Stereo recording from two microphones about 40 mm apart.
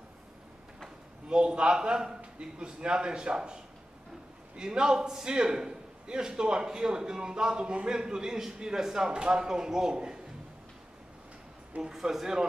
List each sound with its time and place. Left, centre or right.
0.8 s a man's voice: right
11.9 s a man's voice: centre